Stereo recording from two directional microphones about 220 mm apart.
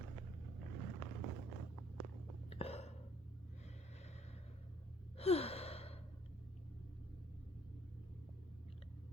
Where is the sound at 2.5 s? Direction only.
25° left (ahead or behind).